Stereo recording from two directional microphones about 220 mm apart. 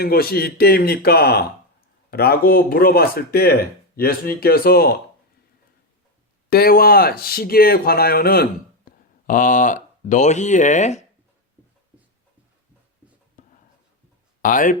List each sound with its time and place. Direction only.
0.0 s speech: 45° left (ahead or behind)
6.5 s speech: 45° left (ahead or behind)
13.4 s writing: 35° left (ahead or behind)
14.4 s speech: 40° left (ahead or behind)